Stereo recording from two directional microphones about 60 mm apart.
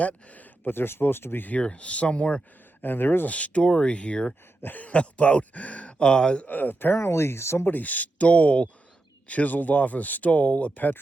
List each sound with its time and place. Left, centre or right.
0.0 s speech: left
1.5 s speech: centre
2.8 s speech: left
3.2 s speech: left
6.5 s speech: left
7.7 s speech: left